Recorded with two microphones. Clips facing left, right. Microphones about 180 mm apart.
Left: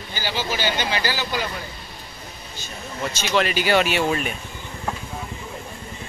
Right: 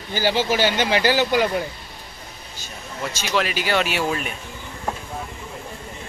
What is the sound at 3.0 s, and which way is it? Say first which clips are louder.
Speech: left 1 dB; 5° right (ahead or behind).